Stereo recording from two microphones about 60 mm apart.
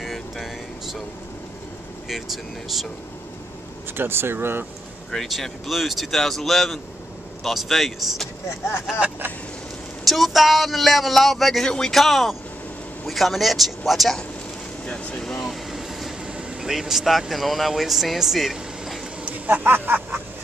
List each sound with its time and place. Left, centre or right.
0.0 s vehicle: centre
2.0 s speech: centre
3.9 s speech: right
5.1 s speech: centre
10.0 s speech: centre
14.9 s vehicle: centre
16.6 s speech: centre
19.2 s a sound: right